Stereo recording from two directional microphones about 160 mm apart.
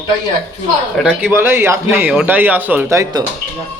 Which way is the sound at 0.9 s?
5° right (ahead or behind).